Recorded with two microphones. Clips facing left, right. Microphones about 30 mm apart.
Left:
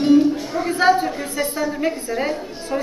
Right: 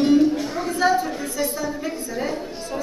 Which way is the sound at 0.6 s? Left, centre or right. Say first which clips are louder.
Left 4 dB; left.